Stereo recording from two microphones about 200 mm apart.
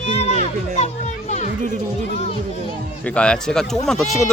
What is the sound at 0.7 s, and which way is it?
Children playing, 35° left (ahead or behind).